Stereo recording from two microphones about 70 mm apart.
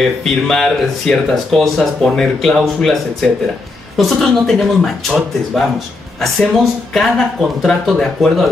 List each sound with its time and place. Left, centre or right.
0.2 s speech: centre